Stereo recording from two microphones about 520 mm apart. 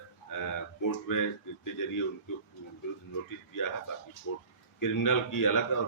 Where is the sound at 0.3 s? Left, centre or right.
Left.